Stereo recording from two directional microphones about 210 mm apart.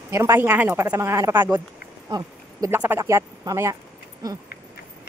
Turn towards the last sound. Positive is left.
turn(degrees=-20)  # may be behind; listen again after turning